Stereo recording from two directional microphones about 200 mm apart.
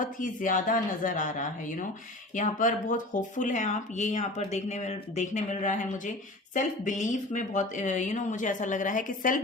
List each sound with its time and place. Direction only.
0.0 s speech: 40° left (ahead or behind)